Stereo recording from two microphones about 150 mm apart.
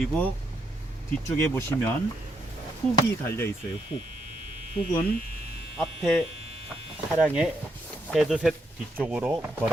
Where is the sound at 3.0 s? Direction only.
15° left (ahead or behind).